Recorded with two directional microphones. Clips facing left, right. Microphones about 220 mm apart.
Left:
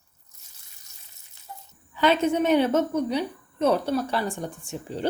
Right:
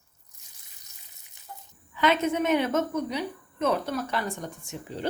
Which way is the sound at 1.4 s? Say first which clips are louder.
Left 2 dB; 20° right (ahead or behind).